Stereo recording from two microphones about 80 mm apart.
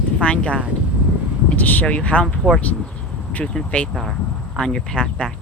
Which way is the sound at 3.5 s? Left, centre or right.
Centre.